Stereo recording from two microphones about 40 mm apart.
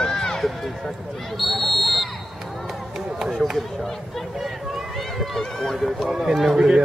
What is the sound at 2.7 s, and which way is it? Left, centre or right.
Run, centre.